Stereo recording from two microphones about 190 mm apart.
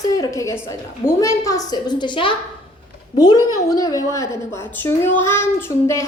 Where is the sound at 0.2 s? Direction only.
15° left (ahead or behind).